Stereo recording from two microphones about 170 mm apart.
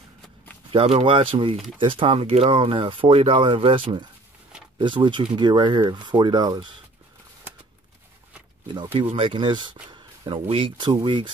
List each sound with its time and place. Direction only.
0.7 s speech: 35° right (ahead or behind)
8.9 s speech: 30° right (ahead or behind)